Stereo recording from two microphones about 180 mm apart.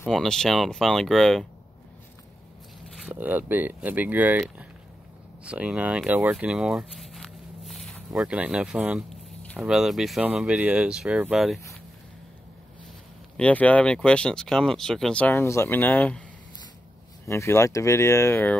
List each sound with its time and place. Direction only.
0.0 s speech: centre (ahead or behind)
3.1 s speech: 10° right (ahead or behind)
13.4 s speech: 10° left (ahead or behind)
17.3 s speech: 15° left (ahead or behind)